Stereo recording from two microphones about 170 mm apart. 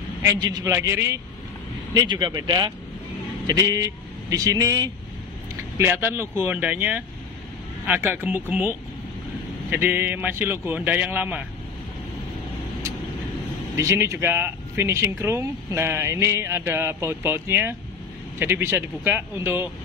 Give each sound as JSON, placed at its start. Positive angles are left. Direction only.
{"t": 0.2, "sound": "speech", "side_deg": -25}
{"t": 13.7, "sound": "speech", "side_deg": -15}